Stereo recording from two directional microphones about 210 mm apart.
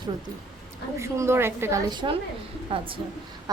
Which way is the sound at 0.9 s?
15° right (ahead or behind).